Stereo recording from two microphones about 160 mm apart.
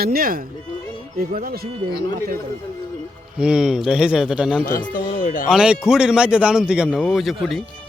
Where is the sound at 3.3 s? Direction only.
5° right (ahead or behind).